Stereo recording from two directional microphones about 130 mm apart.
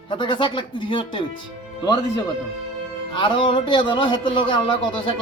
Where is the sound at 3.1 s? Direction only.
40° left (ahead or behind).